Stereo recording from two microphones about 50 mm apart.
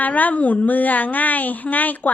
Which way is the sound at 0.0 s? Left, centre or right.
Left.